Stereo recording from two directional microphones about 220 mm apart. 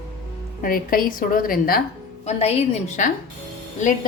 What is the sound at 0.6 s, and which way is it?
A woman's voice, 40° left (ahead or behind).